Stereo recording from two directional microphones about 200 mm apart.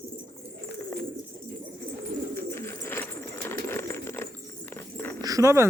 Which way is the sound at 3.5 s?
10° left (ahead or behind).